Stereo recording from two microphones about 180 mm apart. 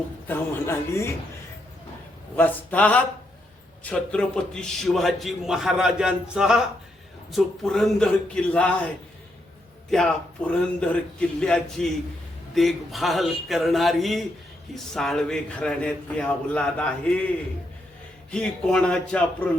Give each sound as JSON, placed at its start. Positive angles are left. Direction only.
{"t": 0.3, "sound": "speech", "side_deg": 15}
{"t": 2.3, "sound": "a man's voice", "side_deg": 10}
{"t": 9.9, "sound": "a man's voice", "side_deg": 5}
{"t": 18.3, "sound": "a man's voice", "side_deg": 5}